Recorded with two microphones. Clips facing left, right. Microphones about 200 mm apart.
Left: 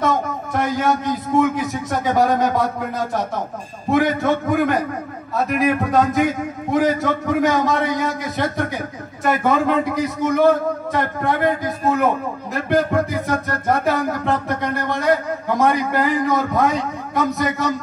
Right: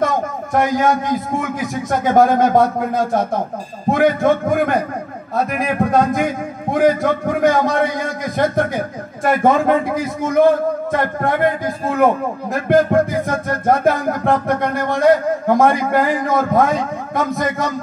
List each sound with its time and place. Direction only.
0.0 s a man's voice: 50° right (ahead or behind)
1.9 s music: 50° right (ahead or behind)